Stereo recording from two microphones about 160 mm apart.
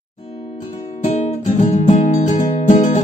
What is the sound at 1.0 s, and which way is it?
Music, 45° left (ahead or behind).